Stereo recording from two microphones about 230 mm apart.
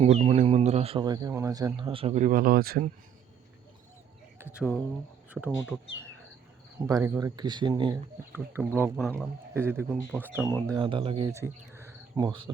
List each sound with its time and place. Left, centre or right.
0.0 s speech: right
4.5 s speech: centre
6.8 s speech: centre
8.3 s speech: centre
10.7 s speech: right